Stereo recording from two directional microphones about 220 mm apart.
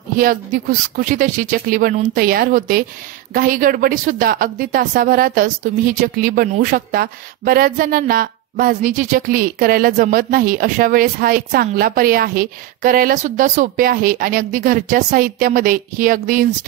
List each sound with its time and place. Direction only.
0.2 s speech: 40° right (ahead or behind)